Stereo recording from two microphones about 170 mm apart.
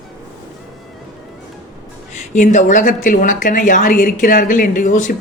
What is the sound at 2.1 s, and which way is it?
Speech, 45° left (ahead or behind).